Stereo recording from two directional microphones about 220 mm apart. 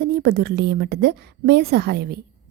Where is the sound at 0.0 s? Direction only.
45° right (ahead or behind).